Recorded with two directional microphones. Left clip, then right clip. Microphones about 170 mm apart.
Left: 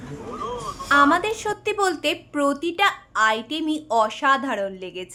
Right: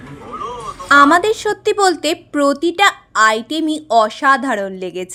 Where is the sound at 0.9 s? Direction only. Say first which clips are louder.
Right 8 dB; 40° right (ahead or behind).